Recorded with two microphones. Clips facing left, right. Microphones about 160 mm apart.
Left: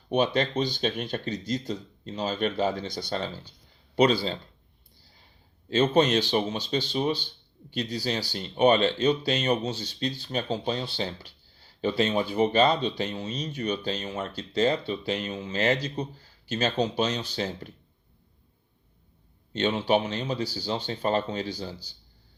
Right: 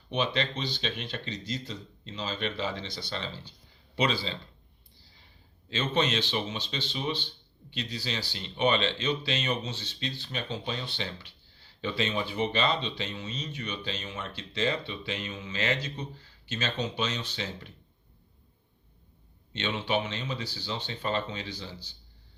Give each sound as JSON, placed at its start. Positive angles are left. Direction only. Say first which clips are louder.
{"t": 0.1, "sound": "speech", "louder": "left 6 dB", "side_deg": 45}
{"t": 5.6, "sound": "speech", "louder": "left 7 dB", "side_deg": 45}
{"t": 19.5, "sound": "speech", "louder": "left 6 dB", "side_deg": 40}